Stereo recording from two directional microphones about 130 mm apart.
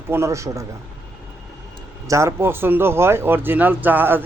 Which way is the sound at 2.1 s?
20° right (ahead or behind).